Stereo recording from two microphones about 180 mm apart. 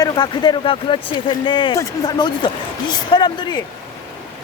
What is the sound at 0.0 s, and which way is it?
Speech, 25° left (ahead or behind).